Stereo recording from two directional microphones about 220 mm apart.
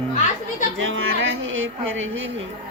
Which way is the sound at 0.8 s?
60° right (ahead or behind).